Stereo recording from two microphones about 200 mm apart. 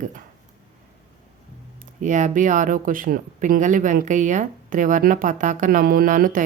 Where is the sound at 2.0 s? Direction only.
40° right (ahead or behind).